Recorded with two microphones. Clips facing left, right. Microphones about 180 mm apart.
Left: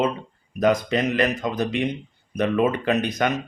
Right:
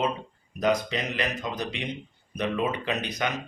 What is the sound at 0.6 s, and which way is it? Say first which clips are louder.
Speech: left 5 dB; 50° left (ahead or behind).